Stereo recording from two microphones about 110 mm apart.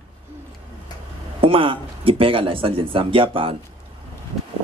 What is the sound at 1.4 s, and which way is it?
Speech, 50° right (ahead or behind).